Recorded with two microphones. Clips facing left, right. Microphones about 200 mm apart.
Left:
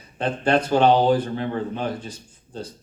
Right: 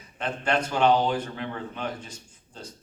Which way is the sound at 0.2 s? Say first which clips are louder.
Left 6 dB; 35° left (ahead or behind).